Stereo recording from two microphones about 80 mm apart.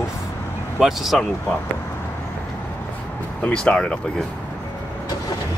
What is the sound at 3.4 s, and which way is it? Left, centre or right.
Speech, centre.